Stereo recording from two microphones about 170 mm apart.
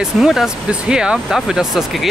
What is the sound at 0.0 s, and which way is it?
Speech, centre (ahead or behind).